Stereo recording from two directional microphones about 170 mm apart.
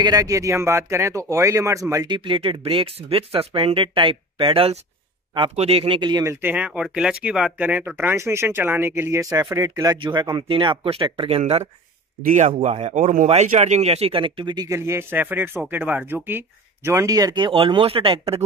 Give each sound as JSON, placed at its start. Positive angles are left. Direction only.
{"t": 0.0, "sound": "speech", "side_deg": -20}
{"t": 6.4, "sound": "speech", "side_deg": -10}
{"t": 12.2, "sound": "a man's voice", "side_deg": -50}